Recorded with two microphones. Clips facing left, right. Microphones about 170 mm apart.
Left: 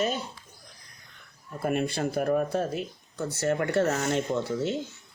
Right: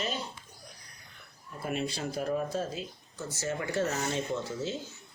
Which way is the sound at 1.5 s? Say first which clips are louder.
Left 6 dB; 55° left (ahead or behind).